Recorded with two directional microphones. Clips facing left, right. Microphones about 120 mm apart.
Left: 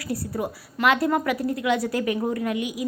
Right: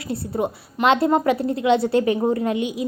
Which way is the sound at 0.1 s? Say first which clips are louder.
Right 4 dB; 25° right (ahead or behind).